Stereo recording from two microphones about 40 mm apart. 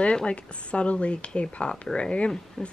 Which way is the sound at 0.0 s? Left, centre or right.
Left.